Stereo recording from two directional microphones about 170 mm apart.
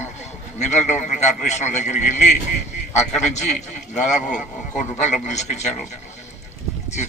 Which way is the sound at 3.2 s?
40° left (ahead or behind).